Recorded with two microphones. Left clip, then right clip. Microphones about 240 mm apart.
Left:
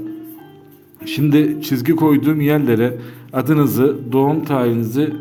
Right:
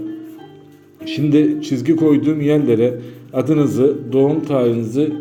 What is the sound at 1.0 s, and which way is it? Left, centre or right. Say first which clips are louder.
A man's voice: even; left.